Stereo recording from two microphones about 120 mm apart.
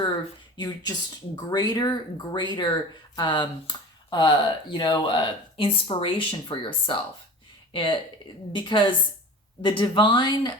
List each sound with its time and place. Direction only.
0.5 s speech: 35° left (ahead or behind)